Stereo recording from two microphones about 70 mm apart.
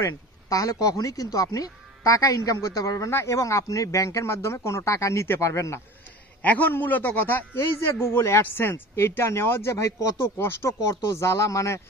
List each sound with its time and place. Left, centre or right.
0.0 s speech: left
3.1 s a man's voice: left
6.4 s a man's voice: left
10.2 s a man's voice: left